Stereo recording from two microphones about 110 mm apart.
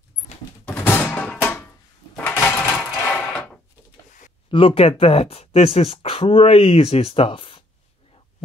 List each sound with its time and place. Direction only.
0.7 s music: 20° left (ahead or behind)
2.2 s coin: 20° left (ahead or behind)
4.5 s speech: 55° left (ahead or behind)